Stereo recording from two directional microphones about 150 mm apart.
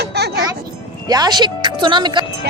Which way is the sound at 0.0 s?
90° right.